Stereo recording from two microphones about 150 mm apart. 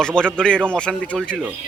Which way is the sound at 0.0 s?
5° left (ahead or behind).